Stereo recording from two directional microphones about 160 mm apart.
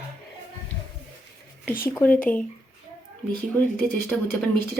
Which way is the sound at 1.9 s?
10° left (ahead or behind).